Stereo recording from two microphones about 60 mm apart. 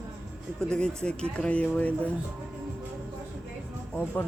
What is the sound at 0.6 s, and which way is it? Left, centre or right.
Speech, centre.